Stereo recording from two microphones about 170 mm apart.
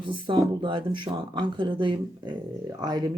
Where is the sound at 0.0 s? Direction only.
30° right (ahead or behind).